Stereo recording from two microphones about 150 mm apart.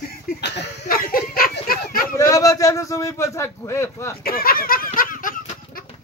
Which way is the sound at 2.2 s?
20° left (ahead or behind).